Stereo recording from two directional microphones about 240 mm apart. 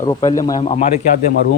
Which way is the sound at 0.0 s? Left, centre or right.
Centre.